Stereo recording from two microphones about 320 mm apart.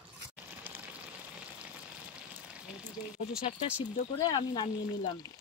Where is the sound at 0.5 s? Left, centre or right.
Centre.